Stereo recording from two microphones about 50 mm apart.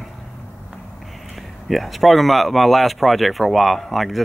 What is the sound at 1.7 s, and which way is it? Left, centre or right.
Speech, centre.